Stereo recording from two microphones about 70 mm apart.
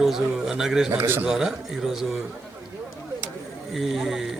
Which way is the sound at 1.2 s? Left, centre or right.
Centre.